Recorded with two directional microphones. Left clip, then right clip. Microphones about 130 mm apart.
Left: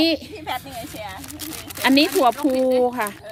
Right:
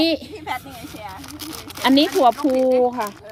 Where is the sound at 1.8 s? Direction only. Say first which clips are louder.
Right 1 dB; 20° right (ahead or behind).